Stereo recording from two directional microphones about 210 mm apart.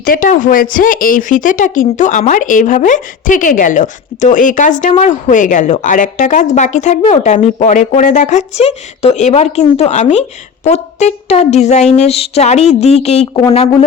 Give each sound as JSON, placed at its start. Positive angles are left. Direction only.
{"t": 0.0, "sound": "speech", "side_deg": 40}